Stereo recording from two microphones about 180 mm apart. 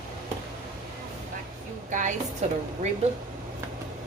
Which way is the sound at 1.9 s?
45° right (ahead or behind).